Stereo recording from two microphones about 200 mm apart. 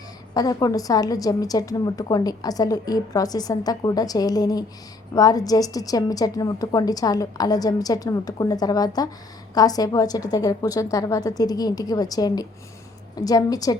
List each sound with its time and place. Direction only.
0.3 s a woman's voice: 20° left (ahead or behind)